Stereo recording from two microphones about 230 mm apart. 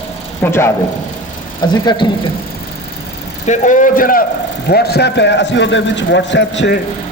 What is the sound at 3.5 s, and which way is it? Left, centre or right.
A man's voice, left.